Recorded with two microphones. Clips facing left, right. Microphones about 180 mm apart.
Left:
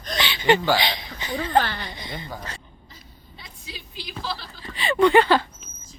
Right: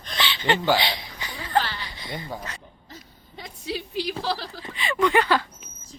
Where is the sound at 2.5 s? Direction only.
30° left (ahead or behind).